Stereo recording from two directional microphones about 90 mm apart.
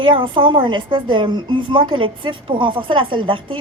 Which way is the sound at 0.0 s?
65° right (ahead or behind).